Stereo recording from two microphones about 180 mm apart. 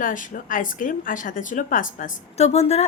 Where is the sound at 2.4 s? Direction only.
35° left (ahead or behind).